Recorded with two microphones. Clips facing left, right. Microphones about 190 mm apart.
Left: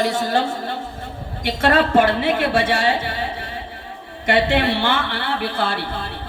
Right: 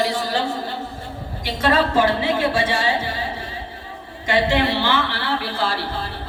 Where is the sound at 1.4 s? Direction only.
55° left (ahead or behind).